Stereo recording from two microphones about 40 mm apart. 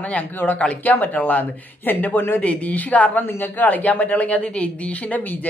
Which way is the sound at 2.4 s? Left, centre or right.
Left.